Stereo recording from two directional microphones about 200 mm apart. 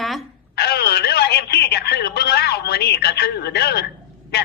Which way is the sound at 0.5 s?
55° left (ahead or behind).